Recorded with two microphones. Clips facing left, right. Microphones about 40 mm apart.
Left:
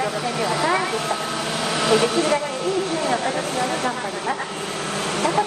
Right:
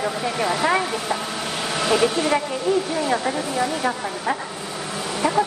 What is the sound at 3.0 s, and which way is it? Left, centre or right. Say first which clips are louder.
Speech: even; centre.